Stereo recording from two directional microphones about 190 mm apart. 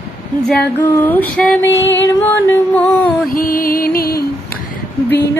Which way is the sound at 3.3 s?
45° left (ahead or behind).